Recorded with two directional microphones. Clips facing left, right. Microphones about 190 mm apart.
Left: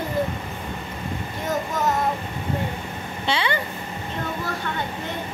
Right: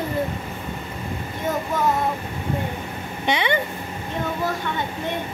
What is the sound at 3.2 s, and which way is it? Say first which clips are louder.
Vehicle: right 2 dB; 20° right (ahead or behind).